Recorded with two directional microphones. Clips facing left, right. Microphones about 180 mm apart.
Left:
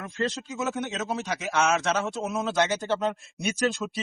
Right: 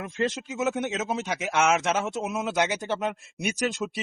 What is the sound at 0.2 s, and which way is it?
A man's voice, 20° right (ahead or behind).